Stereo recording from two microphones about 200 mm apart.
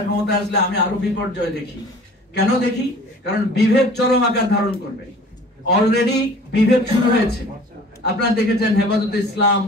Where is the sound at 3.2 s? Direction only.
55° left (ahead or behind).